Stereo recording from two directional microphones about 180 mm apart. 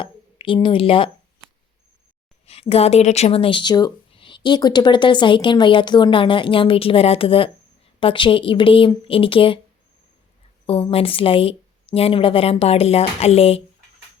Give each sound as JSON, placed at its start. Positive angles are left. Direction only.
{"t": 0.0, "sound": "a woman's voice", "side_deg": 30}
{"t": 2.5, "sound": "speech", "side_deg": 35}
{"t": 10.7, "sound": "a woman's voice", "side_deg": 30}